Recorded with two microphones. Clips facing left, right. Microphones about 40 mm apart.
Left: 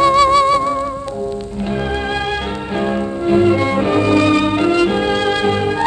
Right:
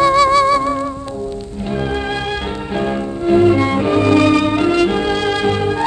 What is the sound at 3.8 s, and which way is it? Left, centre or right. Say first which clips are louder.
Music: right 1 dB; left.